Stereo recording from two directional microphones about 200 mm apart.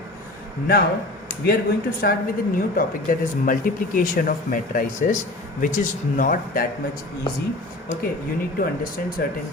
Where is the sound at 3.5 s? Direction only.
40° left (ahead or behind).